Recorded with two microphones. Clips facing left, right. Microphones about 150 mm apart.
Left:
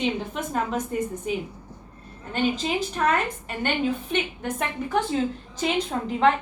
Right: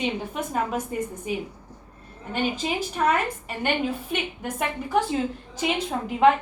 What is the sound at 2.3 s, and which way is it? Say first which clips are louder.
A woman's voice: left 2 dB; 10° right (ahead or behind).